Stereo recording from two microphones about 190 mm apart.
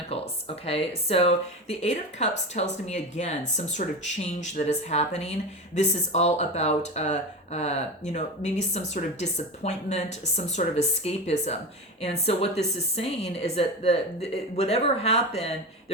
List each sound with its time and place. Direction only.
0.1 s speech: 30° left (ahead or behind)